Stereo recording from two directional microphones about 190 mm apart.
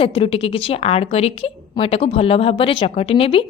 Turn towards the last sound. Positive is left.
turn(degrees=30)  # may be behind; listen again after turning